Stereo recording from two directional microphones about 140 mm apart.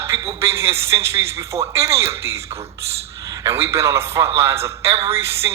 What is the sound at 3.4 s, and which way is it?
A man's voice, 20° right (ahead or behind).